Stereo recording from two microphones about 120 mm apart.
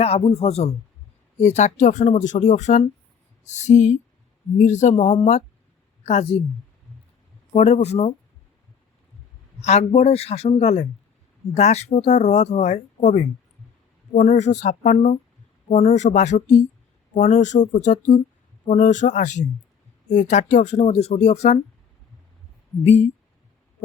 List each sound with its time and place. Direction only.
0.0 s a man's voice: 55° left (ahead or behind)
1.4 s speech: 75° left (ahead or behind)
6.1 s a man's voice: 65° left (ahead or behind)
7.5 s a man's voice: 65° left (ahead or behind)
9.6 s a man's voice: 65° left (ahead or behind)
17.2 s speech: 90° left; by 21.6 s 65° left (ahead or behind)
22.8 s a man's voice: 60° left (ahead or behind)